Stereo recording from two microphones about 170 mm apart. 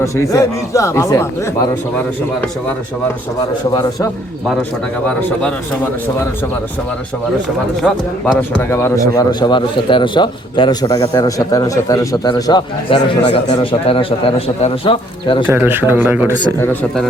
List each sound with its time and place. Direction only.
0.0 s speech: 20° left (ahead or behind)
5.0 s speech: 5° left (ahead or behind)
7.8 s a man's voice: centre (ahead or behind)
8.4 s speech: 15° left (ahead or behind)
9.1 s a man's voice: 25° left (ahead or behind)
15.4 s speech: 10° right (ahead or behind)